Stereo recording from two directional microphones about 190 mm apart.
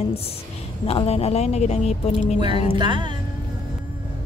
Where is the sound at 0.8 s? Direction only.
30° left (ahead or behind).